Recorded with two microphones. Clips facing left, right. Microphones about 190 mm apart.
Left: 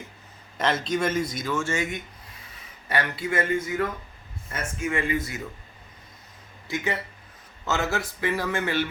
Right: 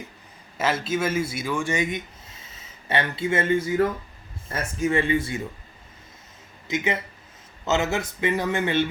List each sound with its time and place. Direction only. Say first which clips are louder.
0.5 s a man's voice: even; 5° right (ahead or behind); by 5.4 s 30° right (ahead or behind)
6.7 s speech: right 3 dB; 20° right (ahead or behind)